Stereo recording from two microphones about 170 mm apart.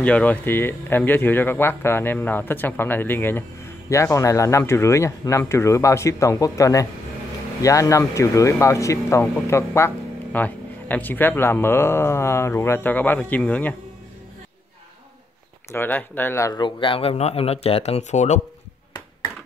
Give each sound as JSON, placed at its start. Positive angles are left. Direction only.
{"t": 0.0, "sound": "speech", "side_deg": 10}
{"t": 15.7, "sound": "speech", "side_deg": 10}